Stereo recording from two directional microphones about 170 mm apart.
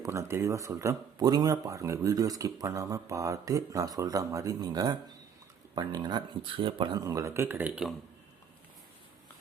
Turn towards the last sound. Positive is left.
turn(degrees=-10)  # may be behind; listen again after turning